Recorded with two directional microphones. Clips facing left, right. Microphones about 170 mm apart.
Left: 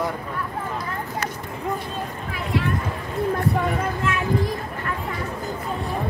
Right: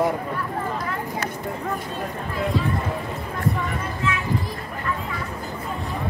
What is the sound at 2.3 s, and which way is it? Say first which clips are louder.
Speech: right 1 dB; 70° left (ahead or behind).